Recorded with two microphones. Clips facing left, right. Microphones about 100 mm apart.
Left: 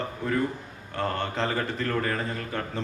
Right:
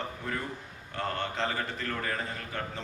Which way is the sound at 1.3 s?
45° left (ahead or behind).